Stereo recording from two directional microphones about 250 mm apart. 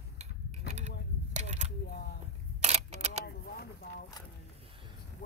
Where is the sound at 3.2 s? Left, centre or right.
Left.